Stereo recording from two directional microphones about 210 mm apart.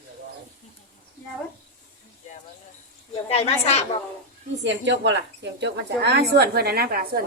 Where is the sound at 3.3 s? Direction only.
30° left (ahead or behind).